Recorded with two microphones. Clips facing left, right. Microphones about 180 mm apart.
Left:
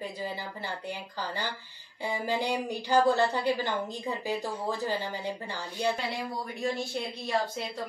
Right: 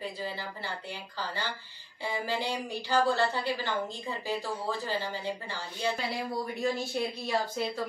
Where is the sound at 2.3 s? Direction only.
15° left (ahead or behind).